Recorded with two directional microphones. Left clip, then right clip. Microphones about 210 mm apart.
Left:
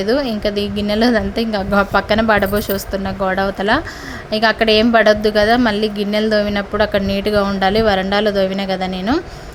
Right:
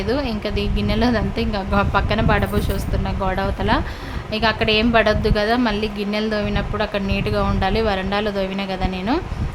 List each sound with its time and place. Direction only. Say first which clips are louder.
0.0 s a woman's voice: left 6 dB; 20° left (ahead or behind)